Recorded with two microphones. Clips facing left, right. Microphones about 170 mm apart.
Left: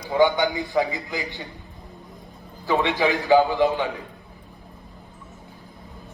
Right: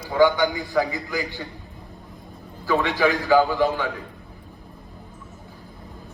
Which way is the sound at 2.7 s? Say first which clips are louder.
Right 1 dB; 20° left (ahead or behind).